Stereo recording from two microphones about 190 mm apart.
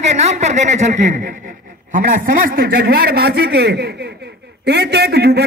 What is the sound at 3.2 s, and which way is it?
A man's voice, 55° right (ahead or behind).